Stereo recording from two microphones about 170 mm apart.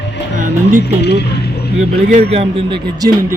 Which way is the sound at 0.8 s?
75° left (ahead or behind).